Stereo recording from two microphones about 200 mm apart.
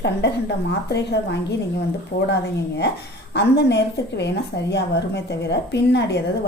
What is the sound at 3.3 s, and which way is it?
A woman's voice, 60° left (ahead or behind).